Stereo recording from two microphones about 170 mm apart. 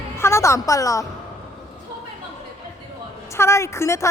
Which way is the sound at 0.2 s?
15° left (ahead or behind).